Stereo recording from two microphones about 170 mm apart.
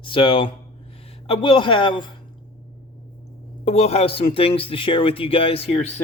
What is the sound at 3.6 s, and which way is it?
A man's voice, 40° left (ahead or behind).